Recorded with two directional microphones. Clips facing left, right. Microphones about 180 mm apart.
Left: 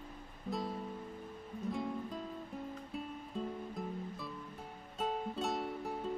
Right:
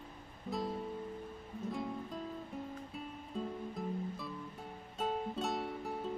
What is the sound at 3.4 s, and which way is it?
Music, centre (ahead or behind).